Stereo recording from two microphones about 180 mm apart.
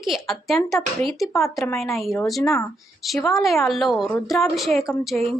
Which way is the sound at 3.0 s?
Centre (ahead or behind).